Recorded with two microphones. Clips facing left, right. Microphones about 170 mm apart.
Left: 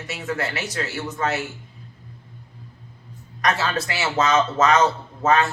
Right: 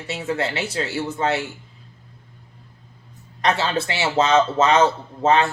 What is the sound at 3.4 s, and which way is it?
Speech, 30° right (ahead or behind).